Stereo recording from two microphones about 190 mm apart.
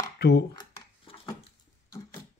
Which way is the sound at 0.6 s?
25° left (ahead or behind).